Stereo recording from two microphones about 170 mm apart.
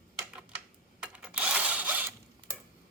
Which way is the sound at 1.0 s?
5° right (ahead or behind).